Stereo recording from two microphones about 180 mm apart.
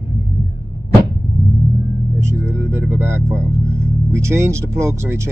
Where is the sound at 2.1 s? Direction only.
15° right (ahead or behind).